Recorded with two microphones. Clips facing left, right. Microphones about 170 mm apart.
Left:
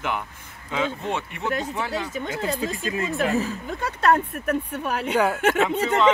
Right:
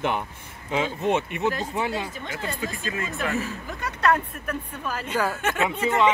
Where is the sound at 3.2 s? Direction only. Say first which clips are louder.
Left 4 dB; 35° left (ahead or behind).